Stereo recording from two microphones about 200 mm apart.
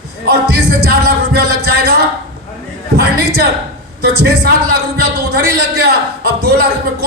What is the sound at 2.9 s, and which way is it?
Speech, 50° right (ahead or behind).